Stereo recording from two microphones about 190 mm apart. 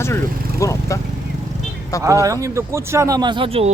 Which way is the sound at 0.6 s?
15° left (ahead or behind).